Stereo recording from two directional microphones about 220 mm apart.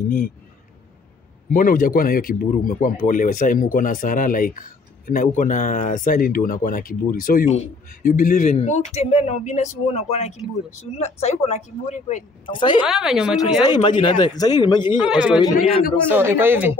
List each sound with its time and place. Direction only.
1.5 s speech: 40° left (ahead or behind)
12.4 s a man's voice: 20° left (ahead or behind)
12.8 s speech: centre (ahead or behind)
13.4 s a man's voice: 20° left (ahead or behind)
15.0 s speech: 5° right (ahead or behind)
15.3 s a man's voice: 20° left (ahead or behind)
16.1 s speech: 10° right (ahead or behind)